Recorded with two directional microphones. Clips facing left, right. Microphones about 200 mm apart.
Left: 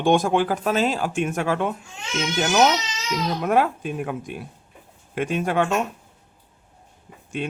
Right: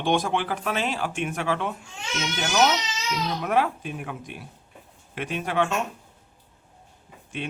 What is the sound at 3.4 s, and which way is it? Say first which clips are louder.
Speech: left 4 dB; 45° left (ahead or behind).